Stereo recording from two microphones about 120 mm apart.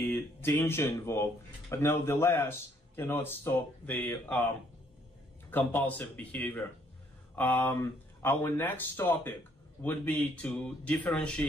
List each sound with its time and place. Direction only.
0.1 s speech: 20° left (ahead or behind)
5.5 s a man's voice: 15° left (ahead or behind)